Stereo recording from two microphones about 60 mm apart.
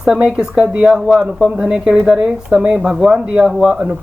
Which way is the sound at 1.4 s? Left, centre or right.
Centre.